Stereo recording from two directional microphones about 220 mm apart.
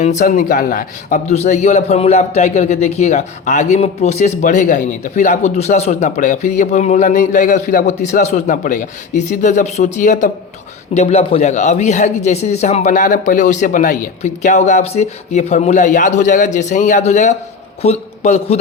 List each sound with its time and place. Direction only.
0.0 s a man's voice: 30° left (ahead or behind)